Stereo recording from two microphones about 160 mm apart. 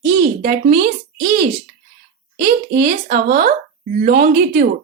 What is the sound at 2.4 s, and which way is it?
Speech, 75° right (ahead or behind).